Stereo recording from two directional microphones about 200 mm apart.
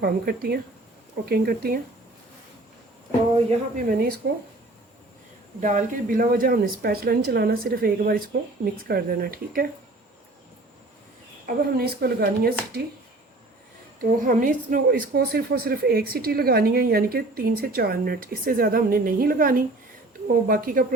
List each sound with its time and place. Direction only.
0.0 s a woman's voice: 50° right (ahead or behind)
3.8 s a woman's voice: 50° right (ahead or behind)
5.5 s a woman's voice: 40° right (ahead or behind)
11.4 s a woman's voice: 50° right (ahead or behind)
14.0 s a woman's voice: 45° right (ahead or behind)